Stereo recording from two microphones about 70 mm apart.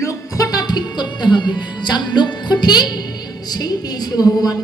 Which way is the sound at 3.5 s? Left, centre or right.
Left.